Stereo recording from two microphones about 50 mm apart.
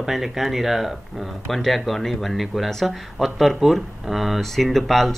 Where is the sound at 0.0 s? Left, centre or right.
Centre.